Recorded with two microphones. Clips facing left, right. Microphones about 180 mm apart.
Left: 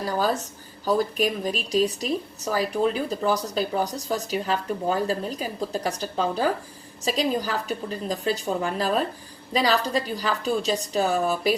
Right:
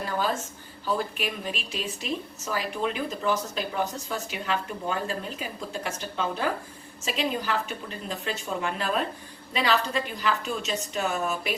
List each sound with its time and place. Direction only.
0.0 s a woman's voice: 40° left (ahead or behind)